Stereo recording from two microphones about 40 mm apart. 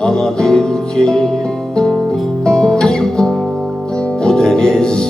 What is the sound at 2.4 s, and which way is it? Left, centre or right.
Music, centre.